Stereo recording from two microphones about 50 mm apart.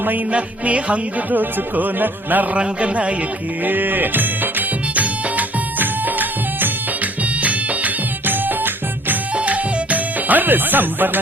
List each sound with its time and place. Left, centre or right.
0.0 s music: right
0.3 s music: right
2.6 s a man's voice: right
3.6 s music: right
9.3 s music: right